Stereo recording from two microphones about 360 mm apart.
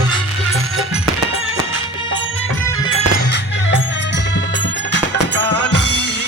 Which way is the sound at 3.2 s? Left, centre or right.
Left.